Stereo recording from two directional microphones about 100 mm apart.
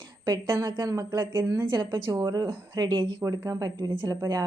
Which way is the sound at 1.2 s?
25° right (ahead or behind).